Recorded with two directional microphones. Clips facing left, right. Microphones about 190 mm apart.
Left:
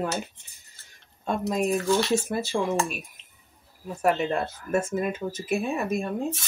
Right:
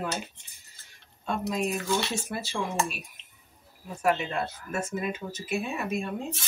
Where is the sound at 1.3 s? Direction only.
50° left (ahead or behind).